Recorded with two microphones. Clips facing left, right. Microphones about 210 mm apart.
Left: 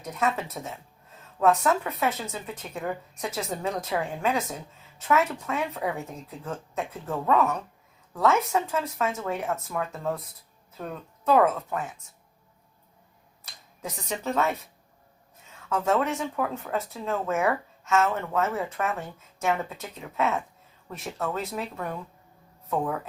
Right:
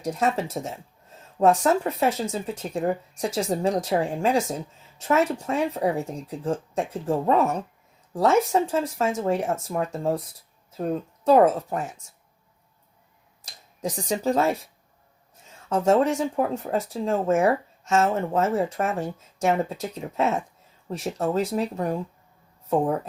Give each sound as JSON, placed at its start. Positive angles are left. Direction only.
{"t": 0.0, "sound": "a woman's voice", "side_deg": -30}
{"t": 13.8, "sound": "a woman's voice", "side_deg": -35}
{"t": 15.7, "sound": "a woman's voice", "side_deg": -40}